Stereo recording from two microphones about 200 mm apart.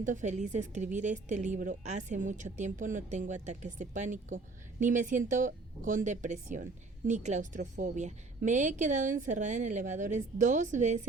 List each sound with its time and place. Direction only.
0.0 s a woman's voice: 40° right (ahead or behind)